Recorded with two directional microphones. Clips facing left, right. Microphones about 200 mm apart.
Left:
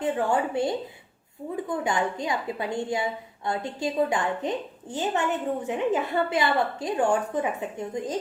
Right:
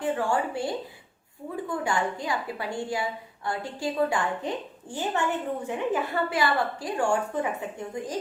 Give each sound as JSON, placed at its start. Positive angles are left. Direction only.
{"t": 0.0, "sound": "a woman's voice", "side_deg": 20}